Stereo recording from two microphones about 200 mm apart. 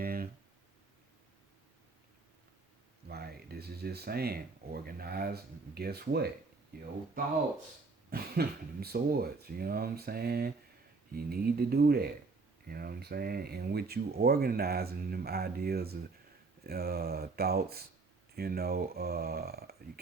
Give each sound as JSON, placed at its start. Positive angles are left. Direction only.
{"t": 0.0, "sound": "a sound", "side_deg": -45}
{"t": 3.1, "sound": "speech", "side_deg": -50}
{"t": 8.1, "sound": "speech", "side_deg": -50}